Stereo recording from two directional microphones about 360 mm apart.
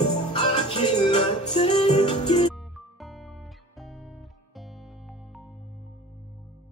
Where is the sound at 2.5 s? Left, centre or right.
Centre.